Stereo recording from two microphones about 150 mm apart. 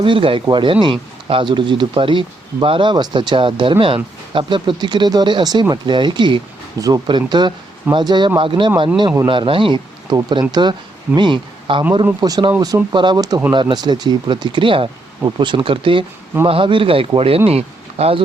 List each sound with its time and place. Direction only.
0.0 s speech: 35° right (ahead or behind)